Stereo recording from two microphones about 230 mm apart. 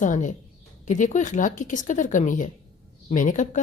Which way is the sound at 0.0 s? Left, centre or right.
Left.